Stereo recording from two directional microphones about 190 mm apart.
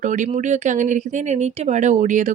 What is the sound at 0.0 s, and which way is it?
Speech, 40° right (ahead or behind).